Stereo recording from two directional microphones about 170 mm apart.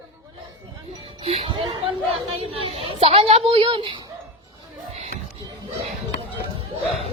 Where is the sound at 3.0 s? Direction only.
35° right (ahead or behind).